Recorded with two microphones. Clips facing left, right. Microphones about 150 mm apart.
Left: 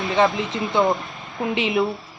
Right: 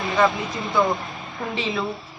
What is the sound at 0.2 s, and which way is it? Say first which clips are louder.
A woman's voice: left 1 dB; 25° left (ahead or behind).